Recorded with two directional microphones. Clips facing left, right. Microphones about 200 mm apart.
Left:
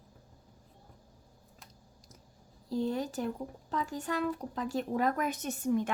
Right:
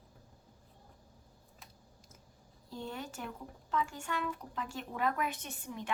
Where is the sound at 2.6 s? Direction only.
35° left (ahead or behind).